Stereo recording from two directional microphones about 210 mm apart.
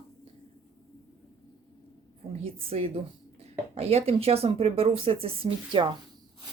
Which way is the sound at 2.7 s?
30° right (ahead or behind).